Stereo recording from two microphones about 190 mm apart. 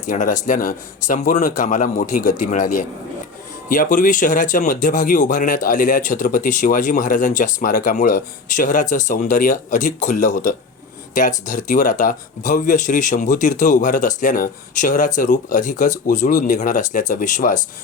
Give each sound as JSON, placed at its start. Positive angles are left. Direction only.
{"t": 0.0, "sound": "speech", "side_deg": 40}